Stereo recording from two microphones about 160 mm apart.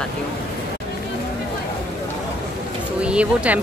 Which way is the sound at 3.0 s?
5° right (ahead or behind).